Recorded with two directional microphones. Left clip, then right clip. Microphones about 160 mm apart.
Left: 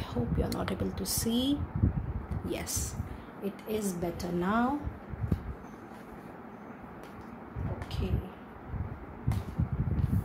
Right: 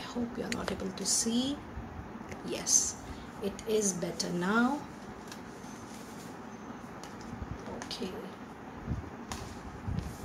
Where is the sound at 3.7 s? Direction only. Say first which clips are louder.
Right 3 dB; 45° left (ahead or behind).